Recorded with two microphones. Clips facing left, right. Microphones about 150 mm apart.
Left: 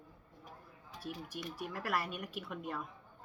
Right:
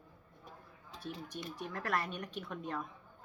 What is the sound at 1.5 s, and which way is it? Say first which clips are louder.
A woman's voice: right 1 dB; 5° left (ahead or behind).